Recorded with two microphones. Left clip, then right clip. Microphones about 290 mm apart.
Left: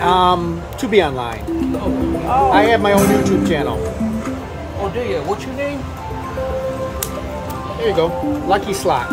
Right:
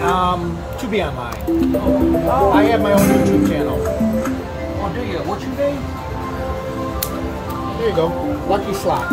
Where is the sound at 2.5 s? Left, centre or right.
Centre.